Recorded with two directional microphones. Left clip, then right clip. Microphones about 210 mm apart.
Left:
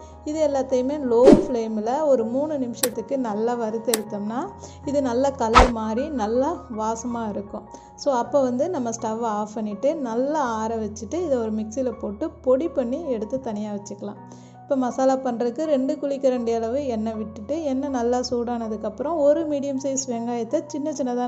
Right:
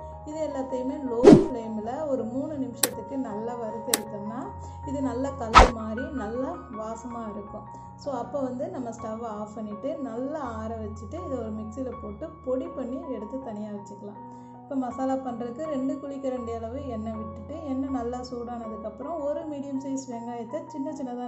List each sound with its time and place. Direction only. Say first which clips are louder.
0.3 s a woman's voice: left 9 dB; 40° left (ahead or behind)
5.5 s music: even; centre (ahead or behind)
5.8 s a woman's voice: left 8 dB; 40° left (ahead or behind)